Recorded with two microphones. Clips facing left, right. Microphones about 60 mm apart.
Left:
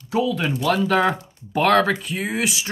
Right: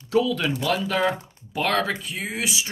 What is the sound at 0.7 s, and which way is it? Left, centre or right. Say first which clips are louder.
Speech: left 5 dB; left.